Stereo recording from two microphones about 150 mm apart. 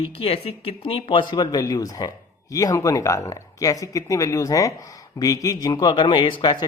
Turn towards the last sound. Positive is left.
turn(degrees=30)  # may be behind; listen again after turning